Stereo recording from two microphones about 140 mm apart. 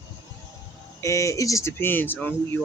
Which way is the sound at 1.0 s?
20° left (ahead or behind).